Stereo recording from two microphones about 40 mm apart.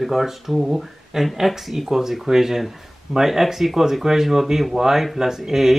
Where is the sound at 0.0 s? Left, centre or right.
Centre.